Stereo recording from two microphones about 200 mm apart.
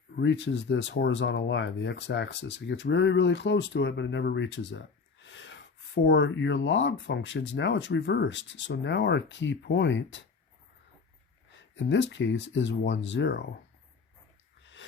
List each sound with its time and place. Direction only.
0.2 s speech: 65° left (ahead or behind)
11.5 s speech: 65° left (ahead or behind)
14.6 s a sound: 65° left (ahead or behind)